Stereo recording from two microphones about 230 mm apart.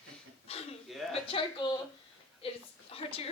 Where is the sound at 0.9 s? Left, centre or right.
Centre.